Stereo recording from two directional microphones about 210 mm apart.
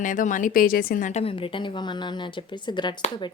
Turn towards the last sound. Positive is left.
turn(degrees=20)  # may be behind; listen again after turning